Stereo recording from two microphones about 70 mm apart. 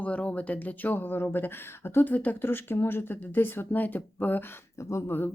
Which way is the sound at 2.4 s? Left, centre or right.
Left.